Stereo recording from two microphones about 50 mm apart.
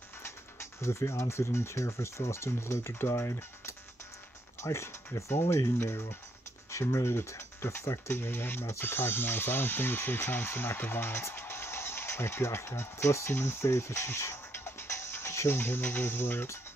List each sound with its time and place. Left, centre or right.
0.2 s speech: left
6.7 s speech: left
8.1 s speech: left